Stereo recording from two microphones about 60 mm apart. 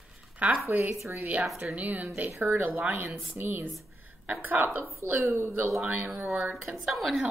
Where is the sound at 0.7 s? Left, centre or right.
Right.